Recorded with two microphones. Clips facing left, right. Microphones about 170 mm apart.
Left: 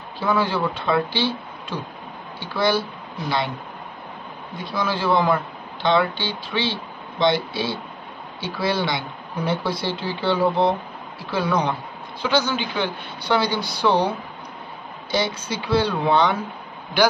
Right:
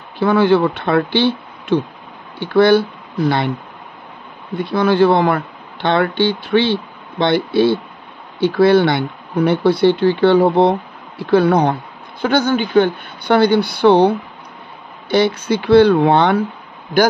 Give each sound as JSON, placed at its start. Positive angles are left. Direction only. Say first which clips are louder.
{"t": 0.2, "sound": "speech", "louder": "right 9 dB", "side_deg": -65}
{"t": 4.6, "sound": "speech", "louder": "right 12 dB", "side_deg": -60}